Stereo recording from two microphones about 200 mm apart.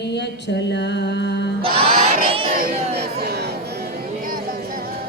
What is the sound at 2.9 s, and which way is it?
Music, 55° right (ahead or behind).